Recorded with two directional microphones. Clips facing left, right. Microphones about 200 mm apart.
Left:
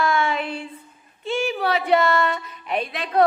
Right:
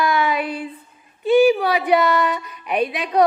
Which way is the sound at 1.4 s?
10° right (ahead or behind).